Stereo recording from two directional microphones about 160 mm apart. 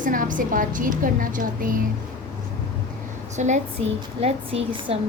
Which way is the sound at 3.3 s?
45° right (ahead or behind).